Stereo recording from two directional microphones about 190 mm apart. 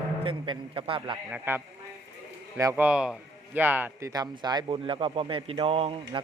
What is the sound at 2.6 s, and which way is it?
Speech, 15° right (ahead or behind).